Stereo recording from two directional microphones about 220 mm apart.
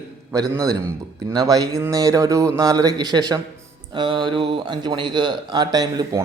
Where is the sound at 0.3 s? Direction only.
15° right (ahead or behind).